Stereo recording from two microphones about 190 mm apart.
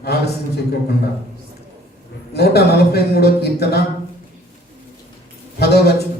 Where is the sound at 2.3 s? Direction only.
60° left (ahead or behind).